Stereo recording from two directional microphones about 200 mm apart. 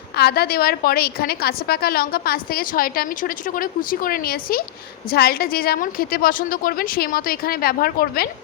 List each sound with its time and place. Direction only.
0.2 s a woman's voice: 50° left (ahead or behind)